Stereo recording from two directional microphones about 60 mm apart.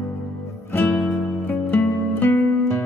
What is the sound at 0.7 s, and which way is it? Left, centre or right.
Music, left.